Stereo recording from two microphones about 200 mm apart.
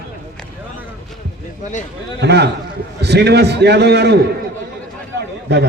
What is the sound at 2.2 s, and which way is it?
A man's voice, 55° right (ahead or behind).